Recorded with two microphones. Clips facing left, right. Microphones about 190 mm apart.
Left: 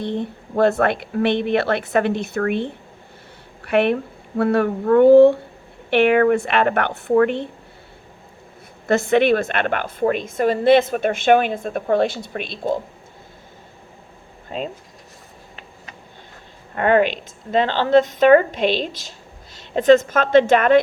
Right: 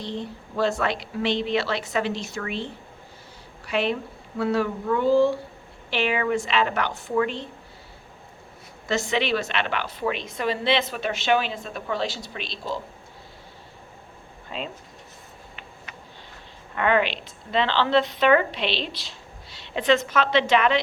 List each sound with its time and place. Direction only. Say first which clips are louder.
0.0 s speech: left 7 dB; 55° left (ahead or behind)
8.9 s a woman's voice: left 9 dB; 55° left (ahead or behind)
14.5 s a woman's voice: left 6 dB; 45° left (ahead or behind)
16.7 s a woman's voice: left 6 dB; 45° left (ahead or behind)